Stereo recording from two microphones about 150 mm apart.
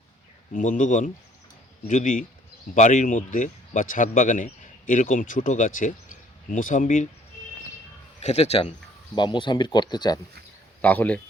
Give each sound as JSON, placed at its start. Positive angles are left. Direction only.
{"t": 0.5, "sound": "a man's voice", "side_deg": 60}
{"t": 8.2, "sound": "speech", "side_deg": 45}
{"t": 9.1, "sound": "speech", "side_deg": 30}
{"t": 10.8, "sound": "speech", "side_deg": 10}